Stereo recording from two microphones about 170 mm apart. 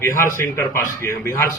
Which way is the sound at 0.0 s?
15° left (ahead or behind).